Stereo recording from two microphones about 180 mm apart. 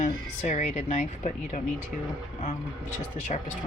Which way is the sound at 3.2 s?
40° left (ahead or behind).